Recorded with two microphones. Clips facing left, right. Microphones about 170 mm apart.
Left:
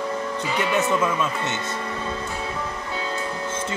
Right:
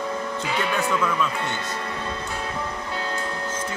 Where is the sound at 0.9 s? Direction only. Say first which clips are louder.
Left 2 dB; 20° left (ahead or behind).